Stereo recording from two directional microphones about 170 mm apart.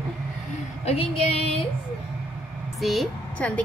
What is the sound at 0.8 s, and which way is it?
Female singing, 35° left (ahead or behind).